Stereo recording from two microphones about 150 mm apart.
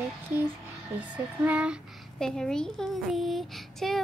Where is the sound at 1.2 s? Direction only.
10° right (ahead or behind).